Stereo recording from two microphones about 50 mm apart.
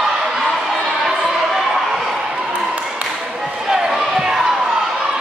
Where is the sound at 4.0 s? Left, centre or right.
Centre.